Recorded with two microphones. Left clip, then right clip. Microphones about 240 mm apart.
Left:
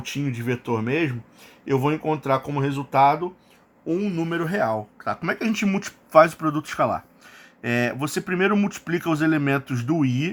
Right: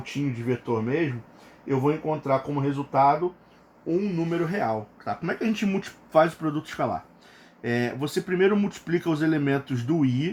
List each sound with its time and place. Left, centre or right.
0.4 s speech: left